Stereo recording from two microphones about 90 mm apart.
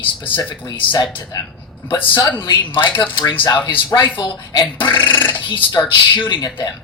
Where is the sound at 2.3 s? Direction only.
60° left (ahead or behind).